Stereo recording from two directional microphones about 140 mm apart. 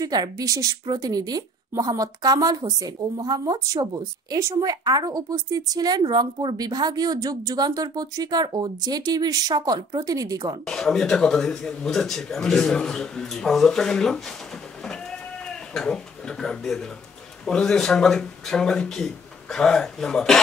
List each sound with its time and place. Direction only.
0.0 s a woman's voice: 25° right (ahead or behind)
10.6 s speech: 5° left (ahead or behind)
14.8 s bleat: 5° left (ahead or behind)
17.5 s speech: 5° left (ahead or behind)